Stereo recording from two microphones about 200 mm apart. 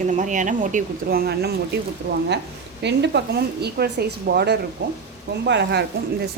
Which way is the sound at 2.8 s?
60° right (ahead or behind).